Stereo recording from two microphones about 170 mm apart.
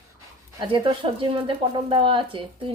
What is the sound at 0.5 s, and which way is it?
Speech, 30° right (ahead or behind).